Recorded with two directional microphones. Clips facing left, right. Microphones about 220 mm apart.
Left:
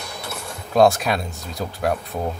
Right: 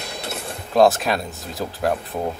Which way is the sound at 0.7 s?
Centre (ahead or behind).